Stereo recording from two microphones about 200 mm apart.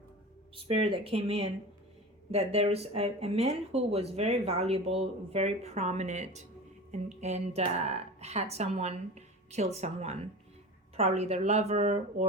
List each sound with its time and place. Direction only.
0.5 s speech: 25° right (ahead or behind)